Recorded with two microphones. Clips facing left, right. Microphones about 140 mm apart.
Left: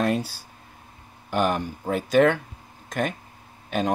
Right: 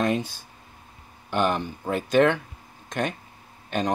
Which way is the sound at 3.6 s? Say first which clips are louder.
Left 1 dB; 5° left (ahead or behind).